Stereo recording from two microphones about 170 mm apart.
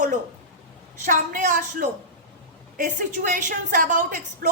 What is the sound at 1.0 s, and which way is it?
Speech, 50° right (ahead or behind).